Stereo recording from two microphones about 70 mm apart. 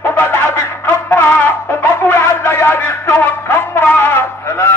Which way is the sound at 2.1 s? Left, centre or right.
Left.